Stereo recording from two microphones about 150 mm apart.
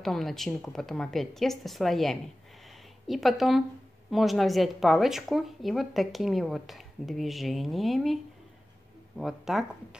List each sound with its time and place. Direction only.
0.0 s speech: centre (ahead or behind)